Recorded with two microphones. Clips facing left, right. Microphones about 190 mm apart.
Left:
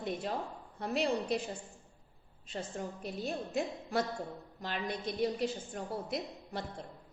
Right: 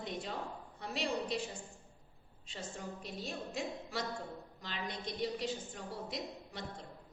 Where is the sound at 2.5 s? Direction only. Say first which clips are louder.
Left 5 dB; 55° left (ahead or behind).